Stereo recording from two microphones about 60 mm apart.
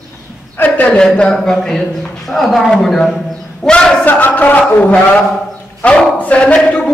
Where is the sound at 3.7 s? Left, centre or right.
Centre.